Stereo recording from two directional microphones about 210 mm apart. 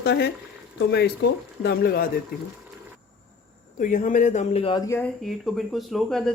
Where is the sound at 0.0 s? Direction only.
55° left (ahead or behind).